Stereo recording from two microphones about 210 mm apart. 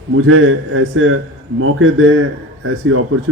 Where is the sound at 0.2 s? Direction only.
70° right (ahead or behind).